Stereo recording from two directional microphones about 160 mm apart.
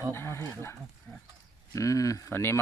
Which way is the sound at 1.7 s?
20° left (ahead or behind).